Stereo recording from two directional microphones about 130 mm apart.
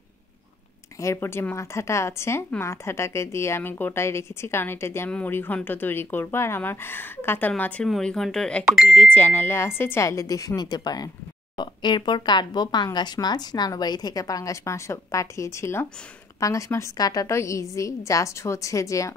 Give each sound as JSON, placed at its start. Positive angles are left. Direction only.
{"t": 1.0, "sound": "a woman's voice", "side_deg": 20}
{"t": 8.9, "sound": "a woman's voice", "side_deg": 10}